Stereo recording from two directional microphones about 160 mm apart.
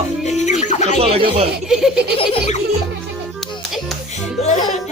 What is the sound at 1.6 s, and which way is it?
Speech, 5° right (ahead or behind).